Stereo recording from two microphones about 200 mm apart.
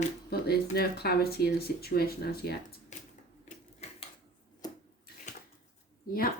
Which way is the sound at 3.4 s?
35° left (ahead or behind).